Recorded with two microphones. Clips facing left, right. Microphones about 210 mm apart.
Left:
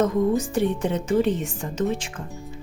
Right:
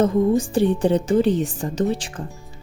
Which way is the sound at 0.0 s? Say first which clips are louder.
Right 3 dB; 30° right (ahead or behind).